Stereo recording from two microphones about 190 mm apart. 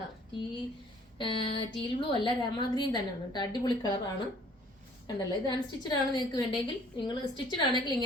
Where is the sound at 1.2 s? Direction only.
25° left (ahead or behind).